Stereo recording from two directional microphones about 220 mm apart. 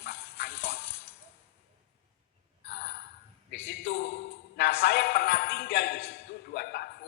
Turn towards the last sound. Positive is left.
turn(degrees=45)  # may be behind; listen again after turning